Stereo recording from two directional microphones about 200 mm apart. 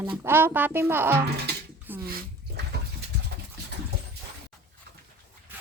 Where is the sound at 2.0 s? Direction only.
50° right (ahead or behind).